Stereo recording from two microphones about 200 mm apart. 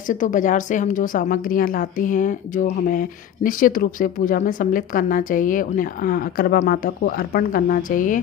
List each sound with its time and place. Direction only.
0.0 s a woman's voice: 40° left (ahead or behind)